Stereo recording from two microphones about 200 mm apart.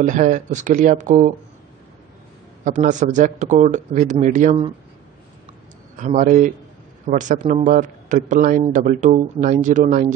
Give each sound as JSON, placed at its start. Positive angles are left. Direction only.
{"t": 0.0, "sound": "a man's voice", "side_deg": -40}
{"t": 2.6, "sound": "a man's voice", "side_deg": -40}
{"t": 5.9, "sound": "a man's voice", "side_deg": -40}